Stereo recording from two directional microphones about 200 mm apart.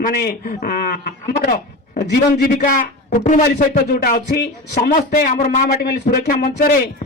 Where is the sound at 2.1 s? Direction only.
50° left (ahead or behind).